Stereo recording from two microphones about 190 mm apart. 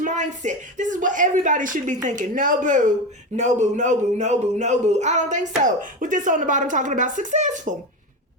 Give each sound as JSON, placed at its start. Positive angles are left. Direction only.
{"t": 0.0, "sound": "speech", "side_deg": -40}